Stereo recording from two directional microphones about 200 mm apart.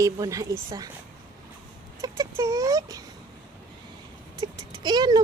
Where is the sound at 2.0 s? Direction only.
15° right (ahead or behind).